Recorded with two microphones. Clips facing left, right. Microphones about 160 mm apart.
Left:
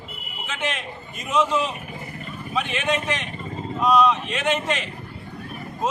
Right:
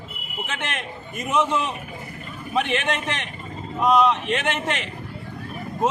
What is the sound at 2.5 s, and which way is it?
A man's voice, 60° right (ahead or behind).